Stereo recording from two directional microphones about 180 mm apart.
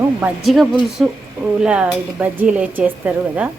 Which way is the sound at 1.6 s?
5° right (ahead or behind).